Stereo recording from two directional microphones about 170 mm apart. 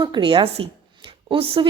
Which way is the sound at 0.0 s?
25° right (ahead or behind).